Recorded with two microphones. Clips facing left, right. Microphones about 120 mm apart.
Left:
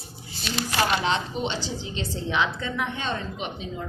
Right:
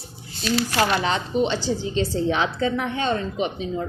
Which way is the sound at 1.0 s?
45° right (ahead or behind).